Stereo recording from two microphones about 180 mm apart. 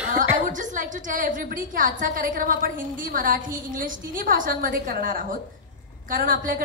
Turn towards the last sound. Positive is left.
turn(degrees=-50)  # may be behind; listen again after turning